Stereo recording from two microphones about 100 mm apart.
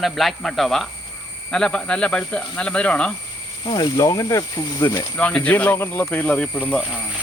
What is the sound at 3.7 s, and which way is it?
Speech, 45° left (ahead or behind).